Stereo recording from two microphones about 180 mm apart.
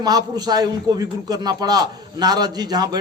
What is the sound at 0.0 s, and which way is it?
A man's voice, 20° right (ahead or behind).